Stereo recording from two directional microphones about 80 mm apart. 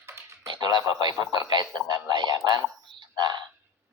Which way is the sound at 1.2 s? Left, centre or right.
Right.